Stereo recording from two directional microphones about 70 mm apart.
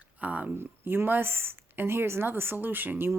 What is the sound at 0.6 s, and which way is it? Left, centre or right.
Speech, right.